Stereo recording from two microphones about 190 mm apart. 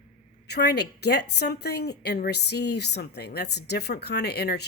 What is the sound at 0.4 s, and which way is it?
A woman's voice, 60° left (ahead or behind).